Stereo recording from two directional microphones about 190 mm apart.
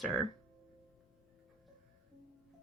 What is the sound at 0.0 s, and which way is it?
Speech, centre (ahead or behind).